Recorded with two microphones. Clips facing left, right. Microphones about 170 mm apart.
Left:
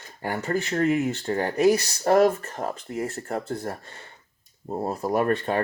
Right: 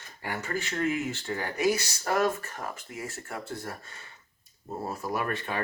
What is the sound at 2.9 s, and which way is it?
Speech, 60° left (ahead or behind).